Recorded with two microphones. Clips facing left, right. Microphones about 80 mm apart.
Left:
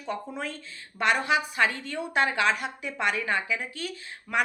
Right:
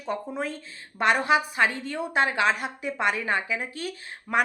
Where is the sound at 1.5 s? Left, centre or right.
Right.